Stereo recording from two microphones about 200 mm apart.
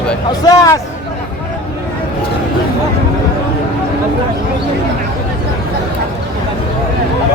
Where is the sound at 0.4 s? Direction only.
20° left (ahead or behind).